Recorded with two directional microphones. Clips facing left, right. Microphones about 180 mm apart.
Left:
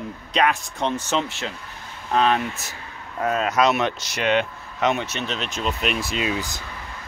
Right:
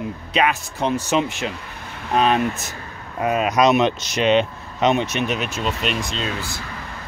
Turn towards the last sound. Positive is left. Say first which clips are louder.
# left 1 dB
turn(degrees=15)  # may be behind; listen again after turning